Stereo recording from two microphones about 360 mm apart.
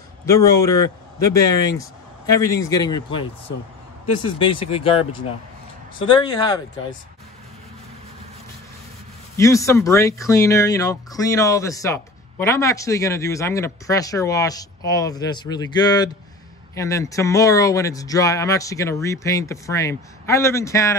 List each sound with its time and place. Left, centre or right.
0.3 s speech: centre
4.6 s speech: centre
9.4 s speech: centre